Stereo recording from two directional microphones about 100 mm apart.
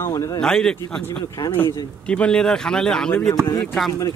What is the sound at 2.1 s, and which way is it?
Speech, 10° left (ahead or behind).